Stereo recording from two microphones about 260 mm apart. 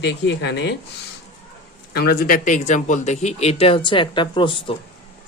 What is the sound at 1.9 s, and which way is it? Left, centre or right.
Speech, left.